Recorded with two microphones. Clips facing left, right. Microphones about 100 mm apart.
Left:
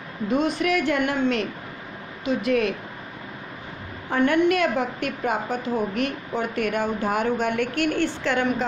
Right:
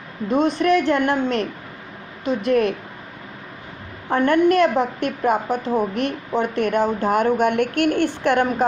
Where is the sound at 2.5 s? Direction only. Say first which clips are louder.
Right 5 dB; 45° right (ahead or behind).